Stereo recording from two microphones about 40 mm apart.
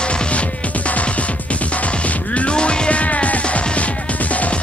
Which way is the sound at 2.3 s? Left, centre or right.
Left.